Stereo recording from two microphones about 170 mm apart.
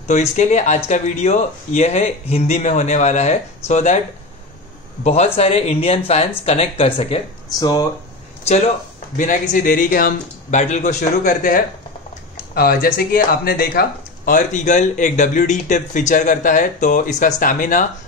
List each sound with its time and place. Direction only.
0.1 s speech: 45° left (ahead or behind)
5.0 s speech: 40° left (ahead or behind)
7.5 s speech: 20° left (ahead or behind)
9.1 s speech: 50° left (ahead or behind)
12.5 s speech: 60° left (ahead or behind)